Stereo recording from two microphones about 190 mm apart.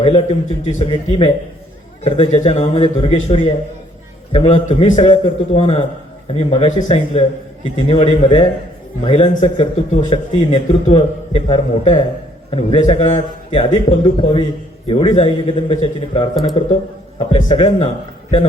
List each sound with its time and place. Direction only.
0.0 s a man's voice: 30° left (ahead or behind)